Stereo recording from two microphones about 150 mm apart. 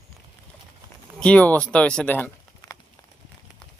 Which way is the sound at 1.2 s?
10° left (ahead or behind).